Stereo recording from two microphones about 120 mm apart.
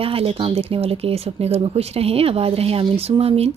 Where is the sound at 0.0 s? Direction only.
50° right (ahead or behind).